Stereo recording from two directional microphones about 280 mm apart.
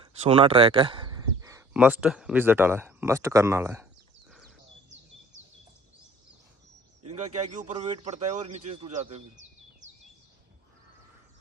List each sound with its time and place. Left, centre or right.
0.2 s speech: right
7.7 s speech: right